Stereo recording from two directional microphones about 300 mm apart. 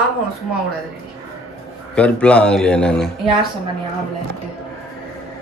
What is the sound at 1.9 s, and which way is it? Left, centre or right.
Speech, centre.